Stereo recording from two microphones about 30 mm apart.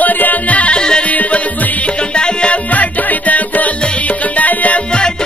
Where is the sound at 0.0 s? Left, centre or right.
Left.